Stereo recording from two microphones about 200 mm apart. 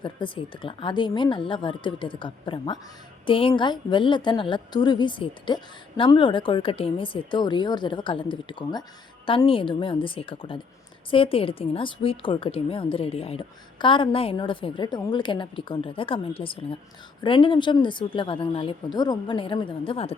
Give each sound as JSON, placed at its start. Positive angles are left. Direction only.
{"t": 0.0, "sound": "a woman's voice", "side_deg": 25}